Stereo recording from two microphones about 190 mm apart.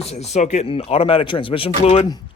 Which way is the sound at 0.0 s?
35° left (ahead or behind).